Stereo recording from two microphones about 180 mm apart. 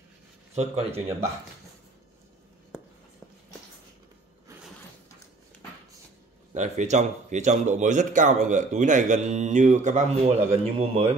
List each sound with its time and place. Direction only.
0.6 s speech: 35° right (ahead or behind)
2.7 s a sound: 5° right (ahead or behind)
6.5 s speech: 40° right (ahead or behind)